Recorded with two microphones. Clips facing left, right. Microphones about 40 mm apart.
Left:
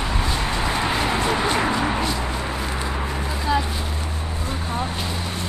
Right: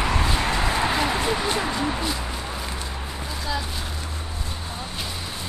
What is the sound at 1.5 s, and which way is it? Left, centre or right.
Speech, left.